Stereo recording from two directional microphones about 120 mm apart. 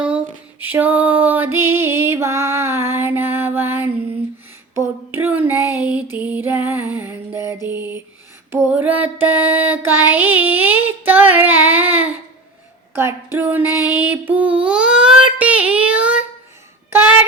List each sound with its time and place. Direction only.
0.6 s music: 15° right (ahead or behind)
12.9 s female singing: 20° right (ahead or behind)
16.9 s a sound: 20° right (ahead or behind)